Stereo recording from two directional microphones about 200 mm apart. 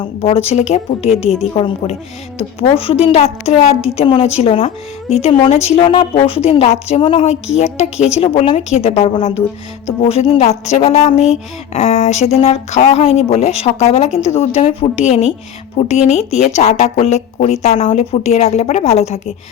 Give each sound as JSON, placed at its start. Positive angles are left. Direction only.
{"t": 0.2, "sound": "a woman's voice", "side_deg": 30}
{"t": 1.1, "sound": "speech", "side_deg": -5}
{"t": 1.5, "sound": "a woman's voice", "side_deg": 30}